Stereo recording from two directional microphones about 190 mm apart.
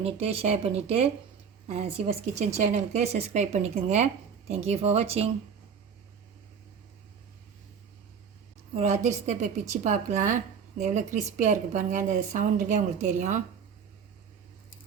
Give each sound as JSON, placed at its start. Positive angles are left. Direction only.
{"t": 0.0, "sound": "a woman's voice", "side_deg": -30}
{"t": 8.7, "sound": "speech", "side_deg": -35}